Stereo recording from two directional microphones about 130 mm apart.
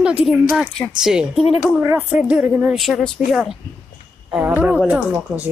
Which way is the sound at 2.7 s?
Centre (ahead or behind).